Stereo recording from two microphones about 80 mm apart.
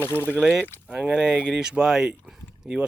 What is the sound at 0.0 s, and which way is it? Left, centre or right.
Speech, left.